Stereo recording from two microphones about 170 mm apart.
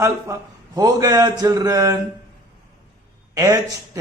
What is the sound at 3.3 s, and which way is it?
Speech, 20° right (ahead or behind).